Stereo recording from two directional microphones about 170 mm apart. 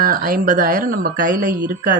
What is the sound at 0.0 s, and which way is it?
Speech, 55° right (ahead or behind).